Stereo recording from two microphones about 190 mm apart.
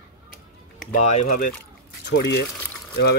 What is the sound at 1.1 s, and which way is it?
Speech, 45° left (ahead or behind).